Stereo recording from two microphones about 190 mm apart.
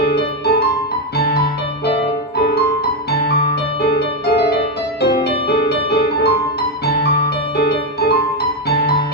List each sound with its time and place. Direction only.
1.2 s music: 55° left (ahead or behind)
5.0 s music: 55° left (ahead or behind)